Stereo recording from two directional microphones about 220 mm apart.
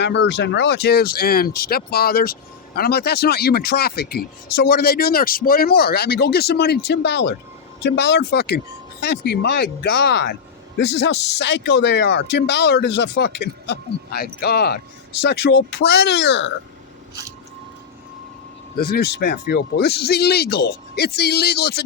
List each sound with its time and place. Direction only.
0.0 s speech: 50° left (ahead or behind)
18.8 s speech: 45° left (ahead or behind)